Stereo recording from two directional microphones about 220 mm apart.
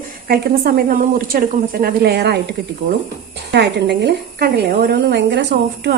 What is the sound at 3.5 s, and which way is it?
A woman's voice, 50° right (ahead or behind).